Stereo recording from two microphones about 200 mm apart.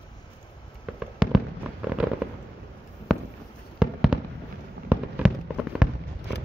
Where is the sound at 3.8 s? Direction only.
5° right (ahead or behind).